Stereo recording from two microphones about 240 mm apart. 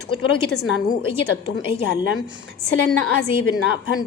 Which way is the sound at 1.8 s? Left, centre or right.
Left.